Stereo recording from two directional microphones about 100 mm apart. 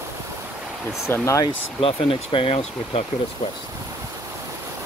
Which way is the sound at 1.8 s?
70° left (ahead or behind).